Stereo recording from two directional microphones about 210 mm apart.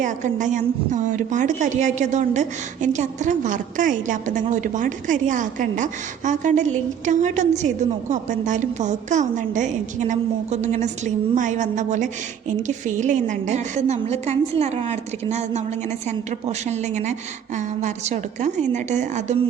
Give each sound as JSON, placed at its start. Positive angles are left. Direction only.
{"t": 0.0, "sound": "a woman's voice", "side_deg": -35}